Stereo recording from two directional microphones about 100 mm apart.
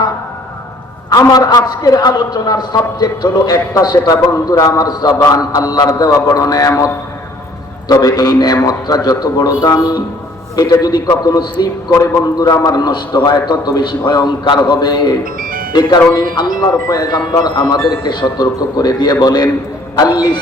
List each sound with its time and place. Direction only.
1.1 s a man's voice: 40° left (ahead or behind)